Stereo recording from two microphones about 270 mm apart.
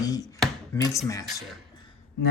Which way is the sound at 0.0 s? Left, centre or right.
Centre.